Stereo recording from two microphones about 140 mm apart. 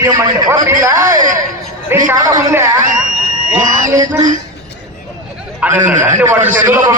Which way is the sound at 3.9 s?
25° right (ahead or behind).